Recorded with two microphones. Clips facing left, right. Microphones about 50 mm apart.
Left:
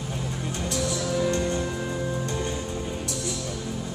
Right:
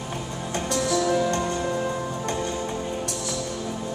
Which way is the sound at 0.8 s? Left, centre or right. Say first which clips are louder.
Right 4 dB; right.